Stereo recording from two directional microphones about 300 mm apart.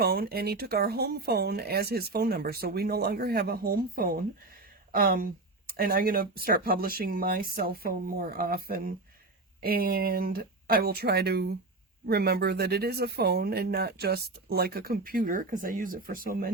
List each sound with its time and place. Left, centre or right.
0.0 s speech: right